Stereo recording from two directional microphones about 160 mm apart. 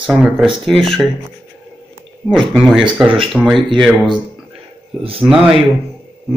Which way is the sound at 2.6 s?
5° right (ahead or behind).